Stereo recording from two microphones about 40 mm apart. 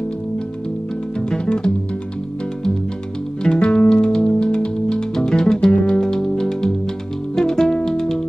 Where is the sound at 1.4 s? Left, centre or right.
Left.